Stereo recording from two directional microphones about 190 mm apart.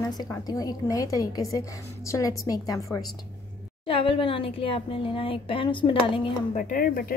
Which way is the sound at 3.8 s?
30° left (ahead or behind).